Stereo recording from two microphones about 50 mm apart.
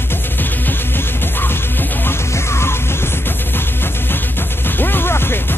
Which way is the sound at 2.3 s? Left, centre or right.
Left.